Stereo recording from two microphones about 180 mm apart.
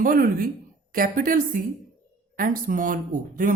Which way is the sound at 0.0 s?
50° right (ahead or behind).